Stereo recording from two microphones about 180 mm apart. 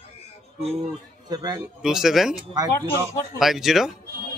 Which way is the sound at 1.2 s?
20° right (ahead or behind).